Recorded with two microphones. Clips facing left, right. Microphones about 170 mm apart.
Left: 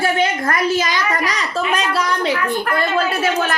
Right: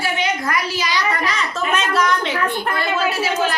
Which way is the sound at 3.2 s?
55° left (ahead or behind).